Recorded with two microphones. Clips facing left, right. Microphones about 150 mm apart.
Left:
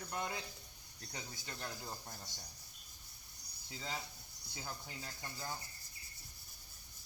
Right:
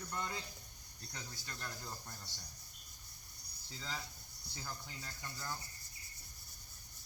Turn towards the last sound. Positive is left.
turn(degrees=15)  # may be behind; listen again after turning